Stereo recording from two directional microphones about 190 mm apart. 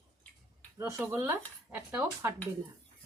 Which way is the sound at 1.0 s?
10° right (ahead or behind).